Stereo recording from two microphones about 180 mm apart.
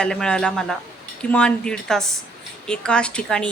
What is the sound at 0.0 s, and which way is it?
A woman's voice, 5° left (ahead or behind).